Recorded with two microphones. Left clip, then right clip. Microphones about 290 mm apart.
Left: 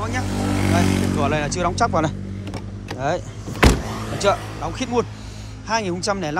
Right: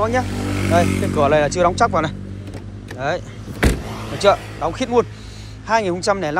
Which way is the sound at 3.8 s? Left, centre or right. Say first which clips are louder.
Left 1 dB; left.